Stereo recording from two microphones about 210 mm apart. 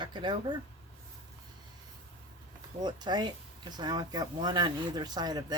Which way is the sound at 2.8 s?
20° right (ahead or behind).